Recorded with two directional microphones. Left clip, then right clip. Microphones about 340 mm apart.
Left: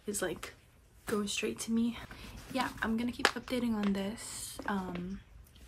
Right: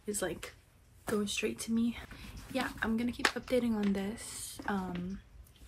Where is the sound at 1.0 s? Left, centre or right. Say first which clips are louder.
Even; centre.